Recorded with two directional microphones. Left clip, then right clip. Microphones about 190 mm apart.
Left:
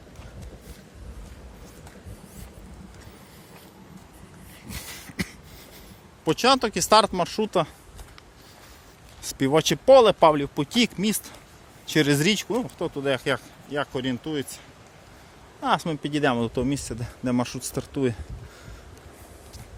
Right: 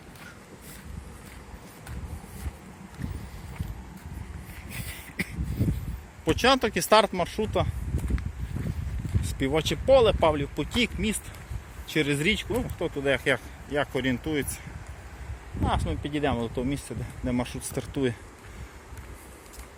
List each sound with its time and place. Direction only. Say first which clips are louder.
4.7 s a sound: left 2 dB; 35° left (ahead or behind)
6.2 s speech: left 2 dB; 20° left (ahead or behind); by 7.7 s 35° left (ahead or behind)
9.4 s speech: left 5 dB; 40° left (ahead or behind); by 14.4 s 5° left (ahead or behind)
15.6 s speech: left 5 dB; 50° left (ahead or behind); by 17.7 s 35° left (ahead or behind)
17.7 s speech: left 2 dB; 20° left (ahead or behind)